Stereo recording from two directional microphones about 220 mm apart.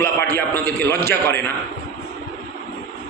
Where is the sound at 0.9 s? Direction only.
10° left (ahead or behind).